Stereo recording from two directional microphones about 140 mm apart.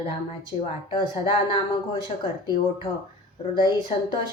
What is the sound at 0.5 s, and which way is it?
Speech, 40° left (ahead or behind).